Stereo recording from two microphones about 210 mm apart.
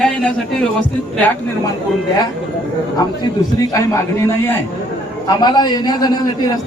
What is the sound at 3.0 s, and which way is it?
Speech, 20° left (ahead or behind).